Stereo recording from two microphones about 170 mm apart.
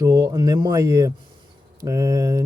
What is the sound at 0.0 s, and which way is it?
Speech, 20° right (ahead or behind).